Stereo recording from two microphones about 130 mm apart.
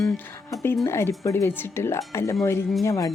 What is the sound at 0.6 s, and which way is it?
Speech, 20° left (ahead or behind).